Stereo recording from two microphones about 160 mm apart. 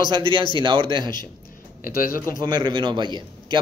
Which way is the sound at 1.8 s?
65° left (ahead or behind).